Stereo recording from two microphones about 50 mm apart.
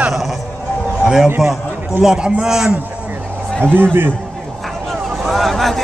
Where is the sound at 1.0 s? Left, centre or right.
Centre.